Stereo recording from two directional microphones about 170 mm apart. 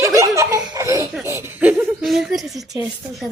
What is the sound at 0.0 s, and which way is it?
Laughter, 20° right (ahead or behind).